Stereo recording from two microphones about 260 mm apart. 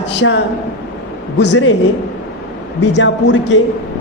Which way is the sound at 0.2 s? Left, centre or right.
Left.